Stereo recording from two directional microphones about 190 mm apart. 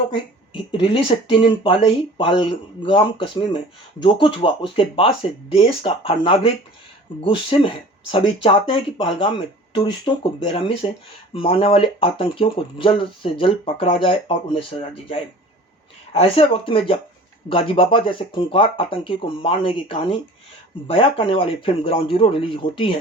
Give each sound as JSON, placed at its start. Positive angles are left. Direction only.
{"t": 0.1, "sound": "speech", "side_deg": 25}